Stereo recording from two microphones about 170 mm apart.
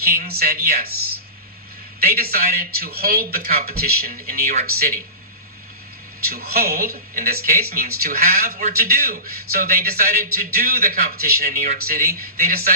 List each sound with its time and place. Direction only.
0.0 s speech: 60° right (ahead or behind)
2.0 s speech: 65° right (ahead or behind)
6.3 s speech: 65° right (ahead or behind)